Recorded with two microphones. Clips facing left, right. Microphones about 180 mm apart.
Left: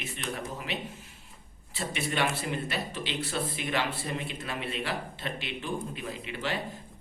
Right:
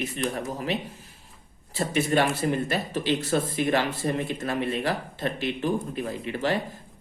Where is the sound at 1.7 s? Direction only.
40° right (ahead or behind).